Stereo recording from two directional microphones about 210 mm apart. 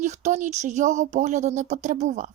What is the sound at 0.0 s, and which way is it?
Speech, 35° right (ahead or behind).